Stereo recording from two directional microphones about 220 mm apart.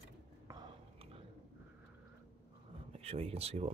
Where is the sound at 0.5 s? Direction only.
20° right (ahead or behind).